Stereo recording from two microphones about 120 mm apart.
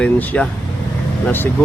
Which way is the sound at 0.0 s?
10° left (ahead or behind).